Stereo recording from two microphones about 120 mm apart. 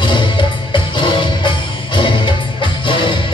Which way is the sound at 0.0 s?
40° left (ahead or behind).